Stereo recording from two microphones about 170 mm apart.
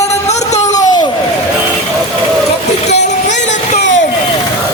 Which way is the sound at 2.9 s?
45° left (ahead or behind).